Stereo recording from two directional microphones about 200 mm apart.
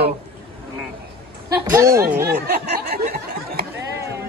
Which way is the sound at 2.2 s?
50° right (ahead or behind).